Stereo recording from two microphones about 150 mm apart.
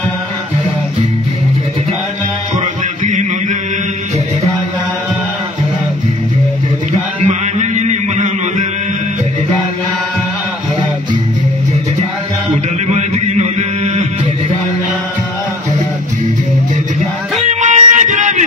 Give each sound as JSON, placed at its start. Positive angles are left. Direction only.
{"t": 3.0, "sound": "music", "side_deg": -60}
{"t": 7.2, "sound": "a sound", "side_deg": -50}
{"t": 12.8, "sound": "mantra", "side_deg": -45}
{"t": 17.5, "sound": "music", "side_deg": -55}